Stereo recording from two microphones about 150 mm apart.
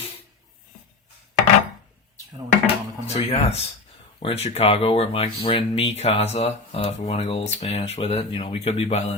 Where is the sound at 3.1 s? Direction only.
45° left (ahead or behind).